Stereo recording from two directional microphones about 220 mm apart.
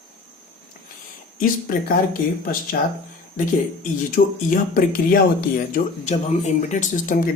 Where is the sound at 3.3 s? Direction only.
35° left (ahead or behind).